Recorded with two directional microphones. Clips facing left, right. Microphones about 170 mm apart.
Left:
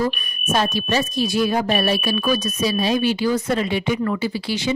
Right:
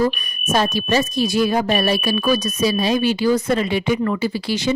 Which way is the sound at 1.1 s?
40° right (ahead or behind).